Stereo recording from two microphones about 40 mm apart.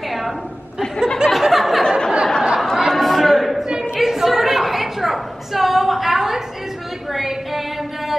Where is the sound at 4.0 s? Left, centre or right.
Centre.